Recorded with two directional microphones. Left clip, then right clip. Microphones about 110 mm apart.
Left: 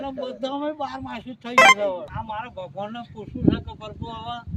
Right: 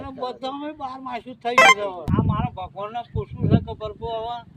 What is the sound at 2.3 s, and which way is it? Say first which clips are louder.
Speech: right 2 dB; 20° left (ahead or behind).